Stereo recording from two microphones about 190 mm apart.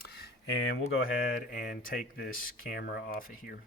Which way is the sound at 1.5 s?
45° left (ahead or behind).